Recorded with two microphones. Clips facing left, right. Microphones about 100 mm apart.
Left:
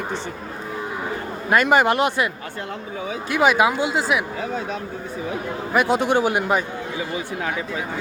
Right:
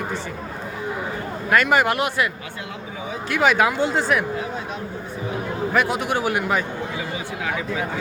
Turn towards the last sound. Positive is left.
turn(degrees=25)  # may be behind; listen again after turning